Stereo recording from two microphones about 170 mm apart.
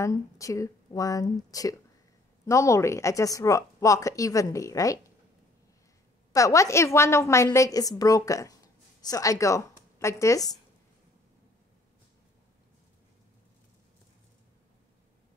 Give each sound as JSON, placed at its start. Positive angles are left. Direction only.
{"t": 0.0, "sound": "a woman's voice", "side_deg": 20}
{"t": 6.3, "sound": "a woman's voice", "side_deg": 20}